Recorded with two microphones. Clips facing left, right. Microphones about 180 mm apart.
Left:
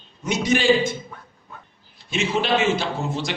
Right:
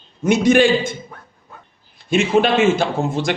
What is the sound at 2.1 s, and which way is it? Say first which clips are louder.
A man's voice: right 7 dB; 55° right (ahead or behind).